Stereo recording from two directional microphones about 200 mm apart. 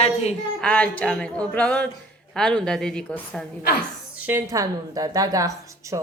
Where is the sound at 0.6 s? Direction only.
5° left (ahead or behind).